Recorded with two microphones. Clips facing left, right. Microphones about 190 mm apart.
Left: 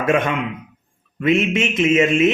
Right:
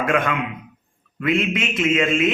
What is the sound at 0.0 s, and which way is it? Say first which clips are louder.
Speech: left 2 dB; 25° left (ahead or behind).